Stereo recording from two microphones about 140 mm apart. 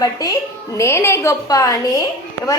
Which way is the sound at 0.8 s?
20° left (ahead or behind).